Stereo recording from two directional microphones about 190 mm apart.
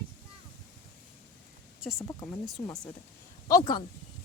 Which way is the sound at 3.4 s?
20° left (ahead or behind).